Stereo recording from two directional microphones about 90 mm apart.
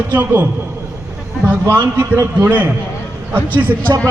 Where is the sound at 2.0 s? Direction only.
30° right (ahead or behind).